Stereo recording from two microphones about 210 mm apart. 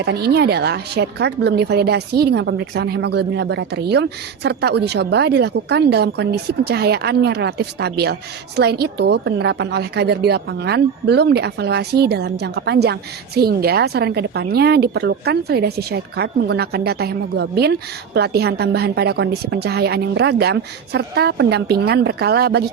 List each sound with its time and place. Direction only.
0.0 s a woman's voice: 50° right (ahead or behind)